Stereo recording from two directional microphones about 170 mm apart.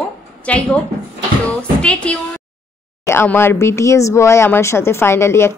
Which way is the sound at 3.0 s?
15° left (ahead or behind).